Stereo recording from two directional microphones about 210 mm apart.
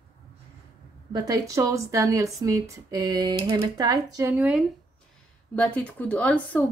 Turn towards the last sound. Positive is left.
turn(degrees=5)  # may be behind; listen again after turning